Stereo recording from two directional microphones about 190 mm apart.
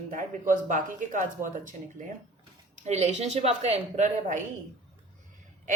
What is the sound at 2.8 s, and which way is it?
Speech, 35° right (ahead or behind).